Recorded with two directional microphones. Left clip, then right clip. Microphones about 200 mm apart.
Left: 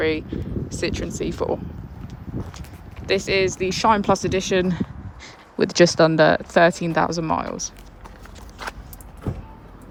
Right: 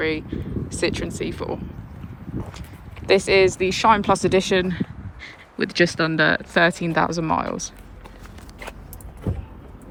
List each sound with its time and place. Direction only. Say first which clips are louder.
0.0 s speech: left 2 dB; 15° left (ahead or behind)
0.8 s speech: right 3 dB; 5° left (ahead or behind)
1.2 s speech: left 7 dB; 15° left (ahead or behind)
2.4 s speech: even; 5° left (ahead or behind)
4.6 s speech: left 2 dB; 20° left (ahead or behind); by 7.6 s 5° left (ahead or behind)
9.2 s vehicle: right 1 dB; centre (ahead or behind)